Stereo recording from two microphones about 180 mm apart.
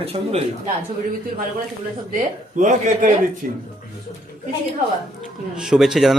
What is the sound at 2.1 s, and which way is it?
Speech, 45° right (ahead or behind).